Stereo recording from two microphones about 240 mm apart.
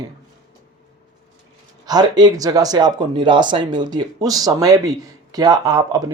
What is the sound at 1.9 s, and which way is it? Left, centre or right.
Speech, centre.